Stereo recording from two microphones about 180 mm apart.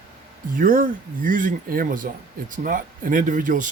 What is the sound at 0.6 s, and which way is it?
Speech, 50° right (ahead or behind).